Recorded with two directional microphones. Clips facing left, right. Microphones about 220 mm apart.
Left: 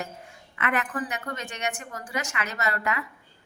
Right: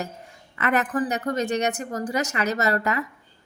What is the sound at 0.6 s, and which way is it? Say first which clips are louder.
A woman's voice: right 5 dB; 40° right (ahead or behind).